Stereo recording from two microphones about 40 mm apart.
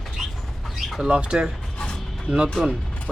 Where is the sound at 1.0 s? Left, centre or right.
Right.